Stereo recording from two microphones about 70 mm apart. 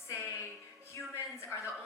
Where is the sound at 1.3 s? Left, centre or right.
Left.